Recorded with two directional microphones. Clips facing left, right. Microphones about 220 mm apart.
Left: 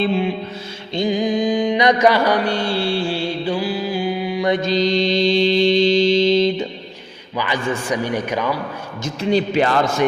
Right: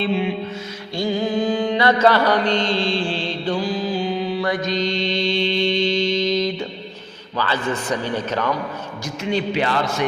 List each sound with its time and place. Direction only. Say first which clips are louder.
0.0 s a man's voice: left 2 dB; 40° left (ahead or behind)
0.9 s mantra: left 2 dB; 15° left (ahead or behind)
7.3 s mantra: left 1 dB; 15° left (ahead or behind)
9.0 s a man's voice: left 5 dB; 35° left (ahead or behind)
9.5 s a man's voice: left 4 dB; 45° left (ahead or behind)